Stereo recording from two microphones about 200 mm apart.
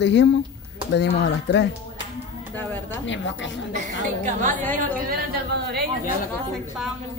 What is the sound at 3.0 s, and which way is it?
Speech, 65° left (ahead or behind).